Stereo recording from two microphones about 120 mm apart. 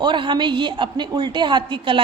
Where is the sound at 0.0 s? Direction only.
40° right (ahead or behind).